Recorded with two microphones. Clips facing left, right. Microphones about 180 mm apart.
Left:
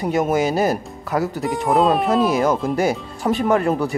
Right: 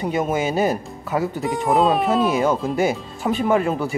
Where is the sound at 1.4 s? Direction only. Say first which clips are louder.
Left 1 dB; centre (ahead or behind).